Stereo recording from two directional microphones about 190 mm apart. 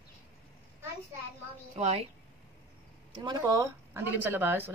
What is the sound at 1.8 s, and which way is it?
Speech, 30° right (ahead or behind).